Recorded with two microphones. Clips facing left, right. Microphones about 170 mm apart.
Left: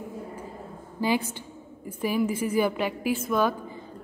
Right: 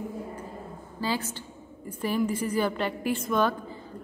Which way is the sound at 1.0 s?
15° left (ahead or behind).